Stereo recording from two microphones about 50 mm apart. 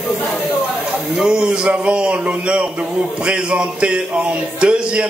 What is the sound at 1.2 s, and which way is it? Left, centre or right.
A man's voice, centre.